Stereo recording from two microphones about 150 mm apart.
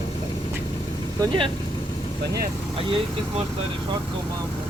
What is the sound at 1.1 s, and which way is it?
Speech, 35° right (ahead or behind).